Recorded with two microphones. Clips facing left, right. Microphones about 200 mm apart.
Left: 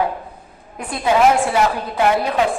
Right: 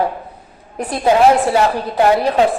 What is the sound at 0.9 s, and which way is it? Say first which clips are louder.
A woman's voice: right 3 dB; 35° right (ahead or behind).